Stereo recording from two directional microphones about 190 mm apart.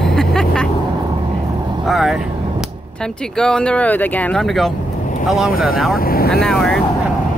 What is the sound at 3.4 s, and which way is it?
Speech, 5° left (ahead or behind).